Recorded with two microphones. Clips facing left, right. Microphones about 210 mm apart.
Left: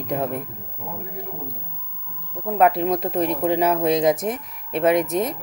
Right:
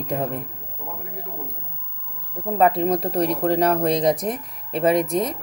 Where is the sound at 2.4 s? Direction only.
Centre (ahead or behind).